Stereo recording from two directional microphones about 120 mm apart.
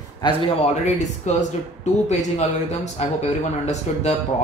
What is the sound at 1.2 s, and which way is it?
Speech, 80° left.